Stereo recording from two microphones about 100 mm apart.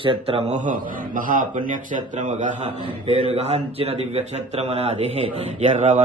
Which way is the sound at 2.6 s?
80° right.